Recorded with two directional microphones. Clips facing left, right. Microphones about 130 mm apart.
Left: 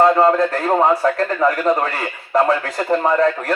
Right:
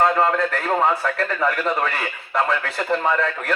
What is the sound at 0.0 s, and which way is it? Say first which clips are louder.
A man's voice: left 5 dB; 35° left (ahead or behind).